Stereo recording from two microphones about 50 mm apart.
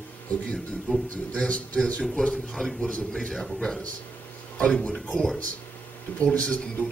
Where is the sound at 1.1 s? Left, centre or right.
Left.